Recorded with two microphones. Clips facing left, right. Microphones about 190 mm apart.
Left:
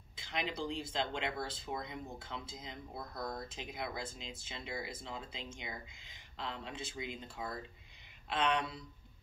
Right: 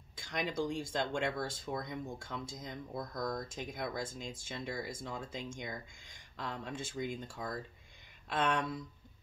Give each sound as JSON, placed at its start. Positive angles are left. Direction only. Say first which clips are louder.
{"t": 0.1, "sound": "speech", "louder": "right 2 dB", "side_deg": -45}